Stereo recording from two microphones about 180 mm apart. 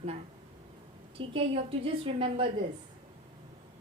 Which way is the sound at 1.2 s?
30° right (ahead or behind).